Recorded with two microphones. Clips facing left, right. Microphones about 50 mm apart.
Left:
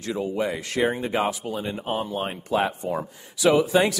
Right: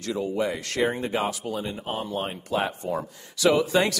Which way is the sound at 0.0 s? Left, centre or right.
Left.